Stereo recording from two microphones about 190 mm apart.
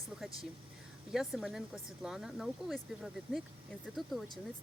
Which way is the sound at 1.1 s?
Centre (ahead or behind).